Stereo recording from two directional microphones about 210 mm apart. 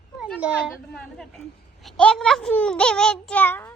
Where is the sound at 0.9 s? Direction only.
Centre (ahead or behind).